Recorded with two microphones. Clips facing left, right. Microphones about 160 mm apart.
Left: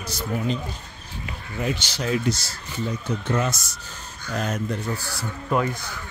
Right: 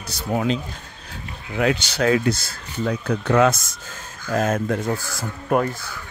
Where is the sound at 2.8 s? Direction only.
70° right (ahead or behind); by 5.7 s 45° right (ahead or behind).